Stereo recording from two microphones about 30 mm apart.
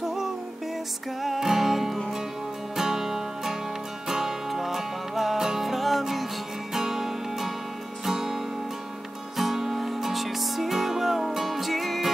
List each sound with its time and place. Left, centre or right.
0.0 s music: centre
9.4 s music: centre